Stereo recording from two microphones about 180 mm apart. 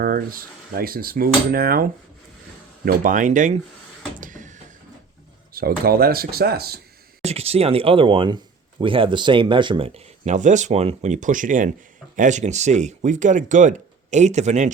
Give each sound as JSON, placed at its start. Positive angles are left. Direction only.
{"t": 0.0, "sound": "speech", "side_deg": -55}
{"t": 4.2, "sound": "a sound", "side_deg": -45}
{"t": 5.5, "sound": "speech", "side_deg": -55}
{"t": 7.2, "sound": "speech", "side_deg": -35}